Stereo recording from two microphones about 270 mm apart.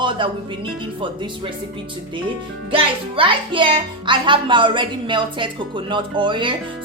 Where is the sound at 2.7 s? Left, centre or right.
Centre.